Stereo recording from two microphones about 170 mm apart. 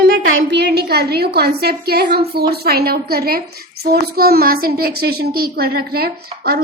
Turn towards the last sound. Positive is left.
turn(degrees=-65)  # may be behind; listen again after turning